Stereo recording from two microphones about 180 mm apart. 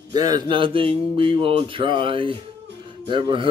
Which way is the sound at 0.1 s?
20° right (ahead or behind).